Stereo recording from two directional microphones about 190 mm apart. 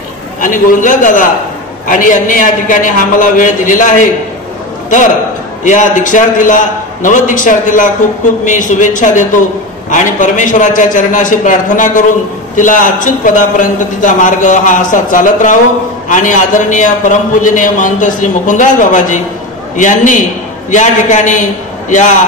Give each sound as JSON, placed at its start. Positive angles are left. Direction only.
{"t": 0.4, "sound": "a man's voice", "side_deg": 45}